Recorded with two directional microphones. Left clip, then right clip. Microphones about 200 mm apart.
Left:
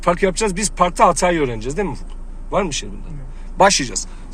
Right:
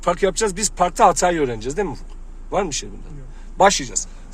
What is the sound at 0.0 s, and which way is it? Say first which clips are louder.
Speech: left 2 dB; 20° right (ahead or behind).